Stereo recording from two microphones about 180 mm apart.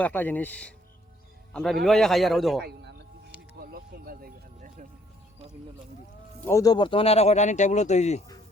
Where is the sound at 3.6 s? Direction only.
60° right (ahead or behind).